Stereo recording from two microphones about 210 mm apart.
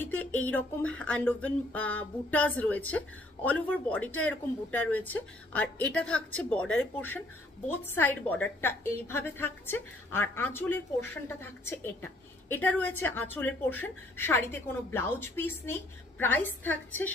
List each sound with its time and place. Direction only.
0.0 s a woman's voice: 10° left (ahead or behind)